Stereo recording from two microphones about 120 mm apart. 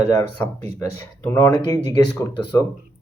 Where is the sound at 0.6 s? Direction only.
25° left (ahead or behind).